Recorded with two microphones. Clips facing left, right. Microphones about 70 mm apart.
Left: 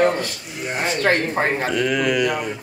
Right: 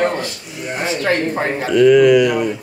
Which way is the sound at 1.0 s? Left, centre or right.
Left.